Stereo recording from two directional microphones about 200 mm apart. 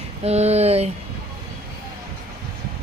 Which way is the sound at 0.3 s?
30° right (ahead or behind).